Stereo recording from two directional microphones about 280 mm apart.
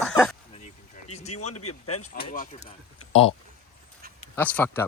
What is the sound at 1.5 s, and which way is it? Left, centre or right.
Speech, left.